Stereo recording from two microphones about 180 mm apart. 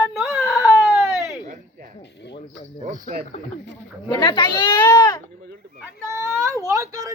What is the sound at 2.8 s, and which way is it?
Speech, 45° right (ahead or behind).